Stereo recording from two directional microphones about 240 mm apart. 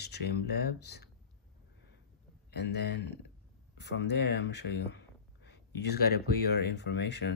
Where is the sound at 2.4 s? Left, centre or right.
Left.